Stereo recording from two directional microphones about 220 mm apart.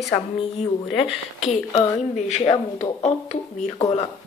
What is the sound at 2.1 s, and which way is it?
Speech, 30° left (ahead or behind).